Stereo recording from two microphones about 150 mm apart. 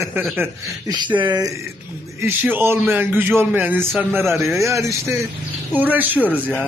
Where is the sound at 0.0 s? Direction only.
15° right (ahead or behind).